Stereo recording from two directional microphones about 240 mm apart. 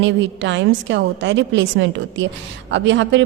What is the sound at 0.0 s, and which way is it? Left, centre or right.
A woman's voice, right.